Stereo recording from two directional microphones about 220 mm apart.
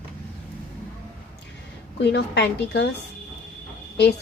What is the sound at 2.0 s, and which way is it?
Speech, 50° left (ahead or behind).